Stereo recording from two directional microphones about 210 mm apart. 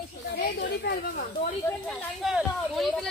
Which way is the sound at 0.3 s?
50° left (ahead or behind).